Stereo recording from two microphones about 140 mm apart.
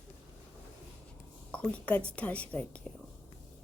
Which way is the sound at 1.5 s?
10° left (ahead or behind).